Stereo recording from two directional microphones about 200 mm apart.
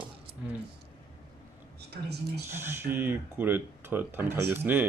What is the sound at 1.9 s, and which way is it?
Speech, 55° right (ahead or behind).